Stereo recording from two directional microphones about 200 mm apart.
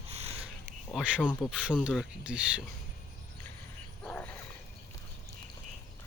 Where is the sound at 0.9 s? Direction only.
5° right (ahead or behind).